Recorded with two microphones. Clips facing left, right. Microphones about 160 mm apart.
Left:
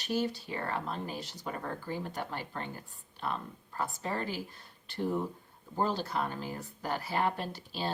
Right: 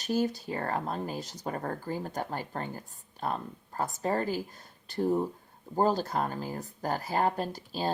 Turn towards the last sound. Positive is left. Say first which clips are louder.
# right 4 dB
turn(degrees=-40)  # may be behind; listen again after turning